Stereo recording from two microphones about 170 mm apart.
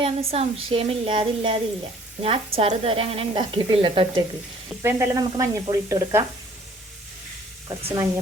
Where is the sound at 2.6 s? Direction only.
35° right (ahead or behind).